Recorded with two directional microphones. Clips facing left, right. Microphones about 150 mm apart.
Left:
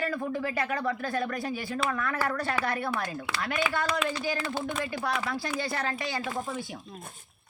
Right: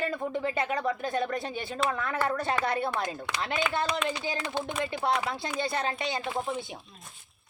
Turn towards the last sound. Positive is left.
turn(degrees=-20)  # may be behind; listen again after turning